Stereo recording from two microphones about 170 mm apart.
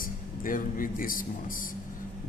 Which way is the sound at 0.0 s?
55° left (ahead or behind).